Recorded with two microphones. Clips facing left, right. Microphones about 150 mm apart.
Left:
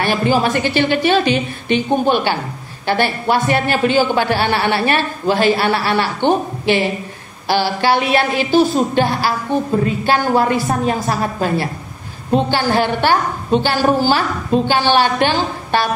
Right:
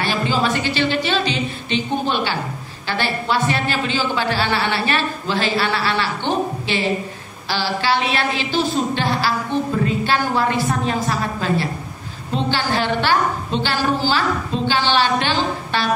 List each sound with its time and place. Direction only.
0.4 s a man's voice: 50° left (ahead or behind)